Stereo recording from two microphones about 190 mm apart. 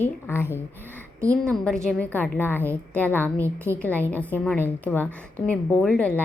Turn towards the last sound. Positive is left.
turn(degrees=5)  # may be behind; listen again after turning